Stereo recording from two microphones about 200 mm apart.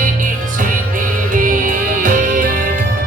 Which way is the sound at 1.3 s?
40° right (ahead or behind).